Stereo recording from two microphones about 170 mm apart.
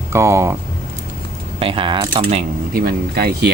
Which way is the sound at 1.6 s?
30° right (ahead or behind).